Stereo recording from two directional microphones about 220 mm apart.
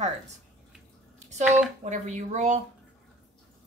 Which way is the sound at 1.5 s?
35° right (ahead or behind).